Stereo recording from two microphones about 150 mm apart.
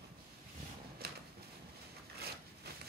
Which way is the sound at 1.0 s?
90° right.